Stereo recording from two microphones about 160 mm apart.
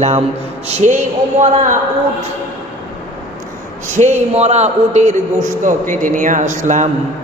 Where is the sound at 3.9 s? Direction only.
45° right (ahead or behind).